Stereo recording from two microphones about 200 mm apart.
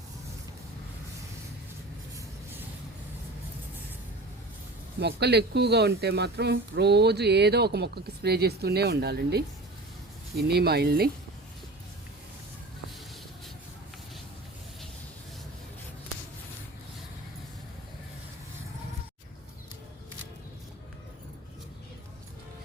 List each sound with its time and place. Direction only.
2.1 s vehicle: 10° right (ahead or behind)
4.9 s speech: 55° right (ahead or behind)